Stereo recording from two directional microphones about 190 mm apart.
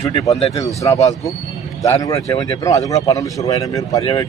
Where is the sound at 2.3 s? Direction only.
20° left (ahead or behind).